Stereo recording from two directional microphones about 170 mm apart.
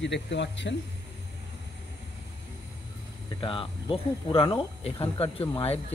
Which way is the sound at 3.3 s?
30° left (ahead or behind).